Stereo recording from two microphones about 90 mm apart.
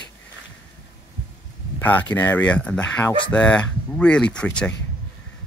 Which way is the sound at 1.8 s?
20° left (ahead or behind).